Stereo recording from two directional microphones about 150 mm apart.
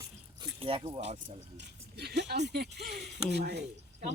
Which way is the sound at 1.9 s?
90° right.